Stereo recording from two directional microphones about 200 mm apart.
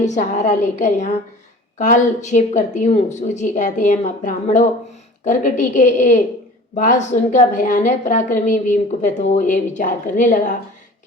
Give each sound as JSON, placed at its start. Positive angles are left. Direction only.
{"t": 0.0, "sound": "a woman's voice", "side_deg": 35}